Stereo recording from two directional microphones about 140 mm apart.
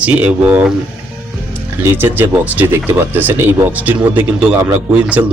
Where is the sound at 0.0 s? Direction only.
10° right (ahead or behind).